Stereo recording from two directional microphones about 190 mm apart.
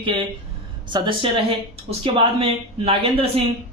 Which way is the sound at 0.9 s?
25° right (ahead or behind).